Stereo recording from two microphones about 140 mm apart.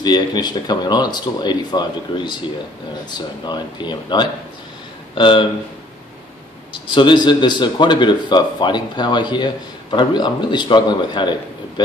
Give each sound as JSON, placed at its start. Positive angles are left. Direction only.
{"t": 0.0, "sound": "speech", "side_deg": 30}
{"t": 6.7, "sound": "speech", "side_deg": 35}